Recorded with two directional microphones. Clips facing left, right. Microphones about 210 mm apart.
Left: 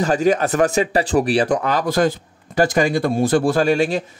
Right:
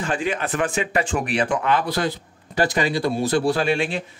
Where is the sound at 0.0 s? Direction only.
40° left (ahead or behind).